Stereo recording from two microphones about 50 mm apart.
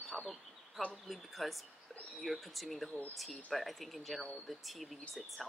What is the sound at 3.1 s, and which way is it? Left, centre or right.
Speech, centre.